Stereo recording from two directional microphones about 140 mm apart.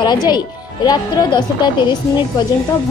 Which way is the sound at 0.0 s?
30° left (ahead or behind).